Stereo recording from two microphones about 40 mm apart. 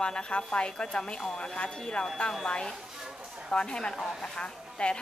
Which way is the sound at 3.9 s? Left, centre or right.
Centre.